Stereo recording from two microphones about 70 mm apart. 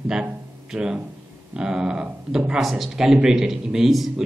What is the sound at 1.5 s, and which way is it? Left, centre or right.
A man's voice, centre.